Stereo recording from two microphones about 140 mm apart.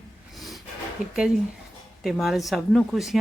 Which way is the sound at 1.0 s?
75° left (ahead or behind).